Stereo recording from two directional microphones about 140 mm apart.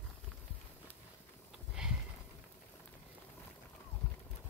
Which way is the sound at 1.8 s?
5° right (ahead or behind).